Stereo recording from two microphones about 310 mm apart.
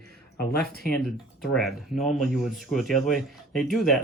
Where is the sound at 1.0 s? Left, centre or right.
Centre.